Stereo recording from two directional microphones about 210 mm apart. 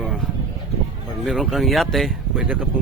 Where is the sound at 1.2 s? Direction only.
Centre (ahead or behind).